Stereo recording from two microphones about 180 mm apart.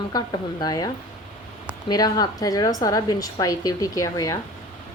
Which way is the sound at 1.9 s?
20° left (ahead or behind).